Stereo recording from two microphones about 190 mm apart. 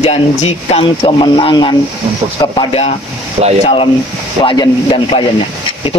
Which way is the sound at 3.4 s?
35° right (ahead or behind).